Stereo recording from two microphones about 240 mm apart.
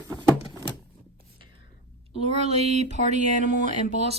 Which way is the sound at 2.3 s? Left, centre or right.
Right.